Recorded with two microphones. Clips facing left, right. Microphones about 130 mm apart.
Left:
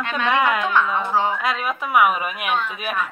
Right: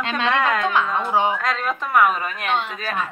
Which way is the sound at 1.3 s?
5° left (ahead or behind).